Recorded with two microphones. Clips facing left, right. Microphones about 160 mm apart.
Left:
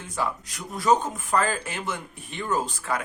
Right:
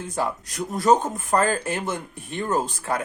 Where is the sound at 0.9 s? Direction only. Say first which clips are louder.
Right 3 dB; 45° right (ahead or behind).